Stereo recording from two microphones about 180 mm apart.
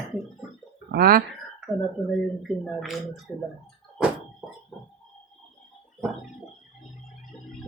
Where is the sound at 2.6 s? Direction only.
Centre (ahead or behind).